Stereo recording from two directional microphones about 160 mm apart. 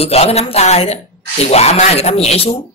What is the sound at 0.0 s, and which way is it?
Speech, 40° left (ahead or behind).